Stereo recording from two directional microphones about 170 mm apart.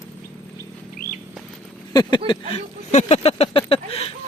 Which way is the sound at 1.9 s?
25° left (ahead or behind).